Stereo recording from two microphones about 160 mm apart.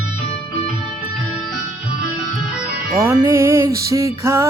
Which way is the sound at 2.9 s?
20° right (ahead or behind).